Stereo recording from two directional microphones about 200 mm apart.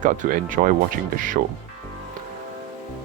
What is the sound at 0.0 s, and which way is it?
Speech, 40° right (ahead or behind).